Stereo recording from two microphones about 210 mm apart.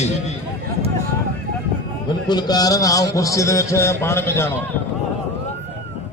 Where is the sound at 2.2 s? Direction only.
20° left (ahead or behind).